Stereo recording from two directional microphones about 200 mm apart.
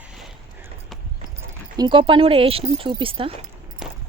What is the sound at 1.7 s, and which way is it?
Speech, 20° right (ahead or behind).